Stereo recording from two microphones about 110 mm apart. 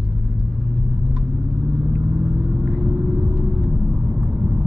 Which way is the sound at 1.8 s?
5° right (ahead or behind).